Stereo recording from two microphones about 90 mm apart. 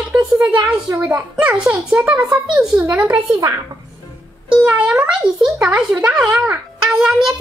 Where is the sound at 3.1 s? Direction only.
40° right (ahead or behind).